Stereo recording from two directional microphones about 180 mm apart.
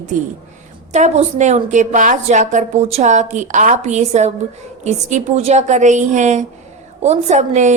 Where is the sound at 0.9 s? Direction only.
40° right (ahead or behind).